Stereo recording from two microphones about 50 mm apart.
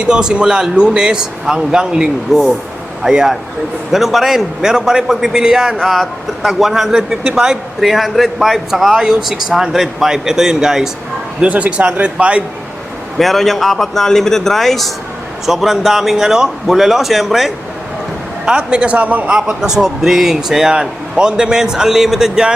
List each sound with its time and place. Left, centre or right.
0.0 s a man's voice: centre
2.3 s a man's voice: centre
5.8 s a man's voice: centre
11.4 s speech: right
13.1 s a man's voice: centre
18.4 s a man's voice: centre
19.3 s a man's voice: centre